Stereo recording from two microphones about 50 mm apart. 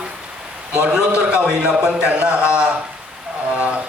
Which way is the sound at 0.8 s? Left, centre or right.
Centre.